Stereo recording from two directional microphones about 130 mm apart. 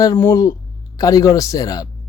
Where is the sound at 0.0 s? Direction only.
25° left (ahead or behind).